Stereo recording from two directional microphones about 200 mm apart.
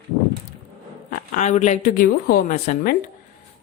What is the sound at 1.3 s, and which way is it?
A woman's voice, 35° left (ahead or behind).